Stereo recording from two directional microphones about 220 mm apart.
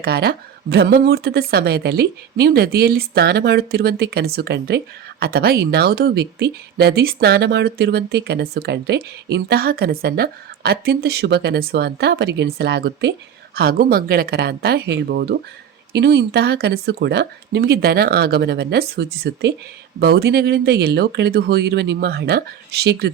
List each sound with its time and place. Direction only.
0.0 s speech: 45° right (ahead or behind)